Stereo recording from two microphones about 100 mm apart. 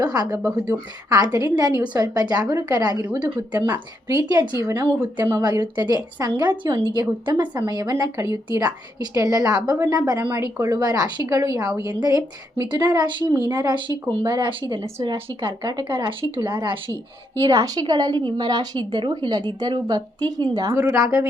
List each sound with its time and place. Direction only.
0.0 s a woman's voice: 40° right (ahead or behind)
0.4 s speech: 25° right (ahead or behind)
1.1 s a woman's voice: 40° right (ahead or behind)
3.2 s a woman's voice: 50° right (ahead or behind)
3.7 s a woman's voice: 40° right (ahead or behind)
17.3 s a woman's voice: 35° right (ahead or behind)